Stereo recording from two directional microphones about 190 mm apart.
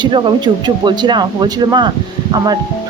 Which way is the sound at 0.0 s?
25° right (ahead or behind).